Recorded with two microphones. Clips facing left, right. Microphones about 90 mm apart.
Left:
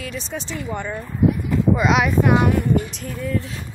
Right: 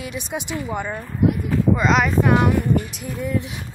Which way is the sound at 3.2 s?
15° right (ahead or behind).